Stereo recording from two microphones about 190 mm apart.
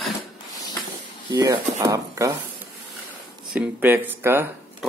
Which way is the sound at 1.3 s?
20° right (ahead or behind).